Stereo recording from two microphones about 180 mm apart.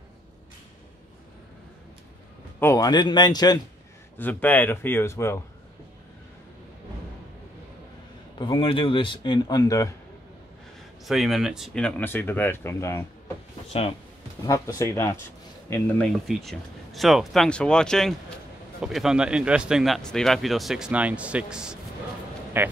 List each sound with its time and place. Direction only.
2.6 s speech: 20° left (ahead or behind)
4.2 s speech: 10° left (ahead or behind)
8.4 s speech: 25° left (ahead or behind)
11.1 s speech: centre (ahead or behind)
13.7 s speech: 35° left (ahead or behind)
14.4 s a man's voice: 20° left (ahead or behind); by 22.7 s 10° right (ahead or behind)